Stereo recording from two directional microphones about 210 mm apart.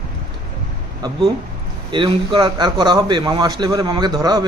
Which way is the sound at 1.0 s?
20° right (ahead or behind).